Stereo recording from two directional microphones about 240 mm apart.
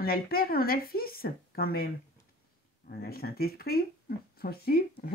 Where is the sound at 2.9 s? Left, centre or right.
Left.